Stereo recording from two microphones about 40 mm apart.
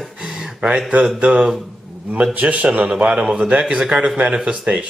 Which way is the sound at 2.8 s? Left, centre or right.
Right.